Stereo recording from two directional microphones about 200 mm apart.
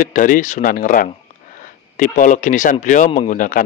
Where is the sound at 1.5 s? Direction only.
40° left (ahead or behind).